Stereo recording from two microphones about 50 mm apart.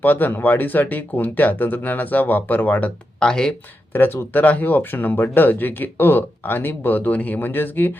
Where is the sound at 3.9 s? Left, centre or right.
Left.